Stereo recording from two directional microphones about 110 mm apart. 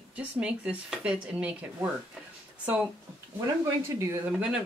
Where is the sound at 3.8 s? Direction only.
25° right (ahead or behind).